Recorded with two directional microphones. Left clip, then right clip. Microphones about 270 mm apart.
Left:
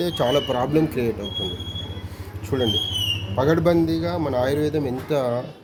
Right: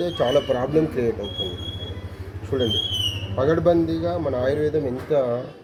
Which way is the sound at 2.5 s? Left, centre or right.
Left.